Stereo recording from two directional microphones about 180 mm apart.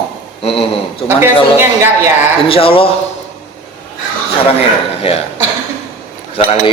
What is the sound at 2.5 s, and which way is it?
Speech, 30° left (ahead or behind).